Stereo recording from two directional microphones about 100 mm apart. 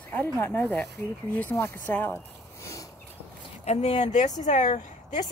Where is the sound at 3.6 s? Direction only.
90° left.